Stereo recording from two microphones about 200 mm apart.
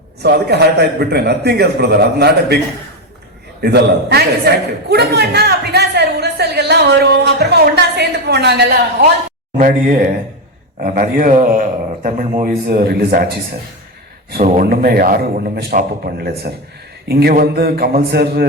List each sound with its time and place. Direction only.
0.2 s a man's voice: 55° right (ahead or behind)
3.6 s a man's voice: 55° right (ahead or behind)
9.6 s a man's voice: 45° right (ahead or behind)
14.3 s a man's voice: 50° right (ahead or behind)